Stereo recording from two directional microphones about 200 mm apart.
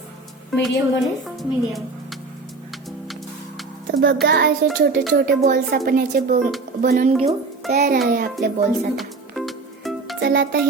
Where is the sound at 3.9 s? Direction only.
60° right (ahead or behind).